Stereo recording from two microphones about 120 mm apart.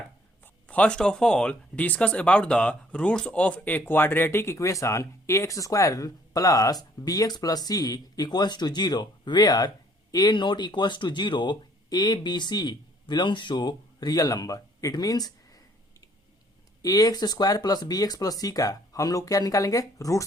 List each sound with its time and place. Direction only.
0.4 s speech: 10° left (ahead or behind); by 20.2 s 25° left (ahead or behind)